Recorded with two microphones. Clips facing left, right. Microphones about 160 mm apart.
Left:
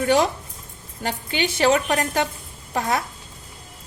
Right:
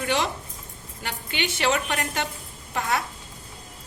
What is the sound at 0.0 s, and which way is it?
A woman's voice, 45° left (ahead or behind).